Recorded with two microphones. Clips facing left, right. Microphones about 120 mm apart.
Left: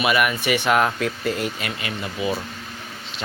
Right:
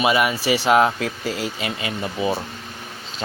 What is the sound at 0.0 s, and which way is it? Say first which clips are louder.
Speech: right 2 dB; 25° right (ahead or behind).